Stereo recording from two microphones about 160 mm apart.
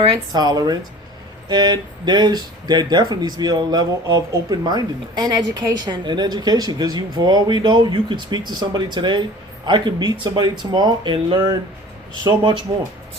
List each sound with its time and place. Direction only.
0.0 s speech: 30° right (ahead or behind)